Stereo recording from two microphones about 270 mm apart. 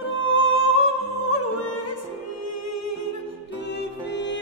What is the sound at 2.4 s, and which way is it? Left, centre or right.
Music, left.